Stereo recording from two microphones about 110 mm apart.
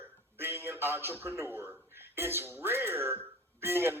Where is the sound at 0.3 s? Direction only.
20° right (ahead or behind).